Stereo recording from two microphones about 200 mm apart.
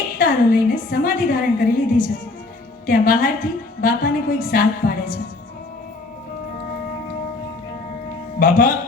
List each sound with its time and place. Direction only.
0.2 s a woman's voice: 45° left (ahead or behind)
8.4 s a woman's voice: 45° left (ahead or behind)